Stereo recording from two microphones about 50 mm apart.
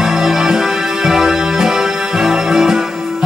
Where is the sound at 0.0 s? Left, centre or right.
Centre.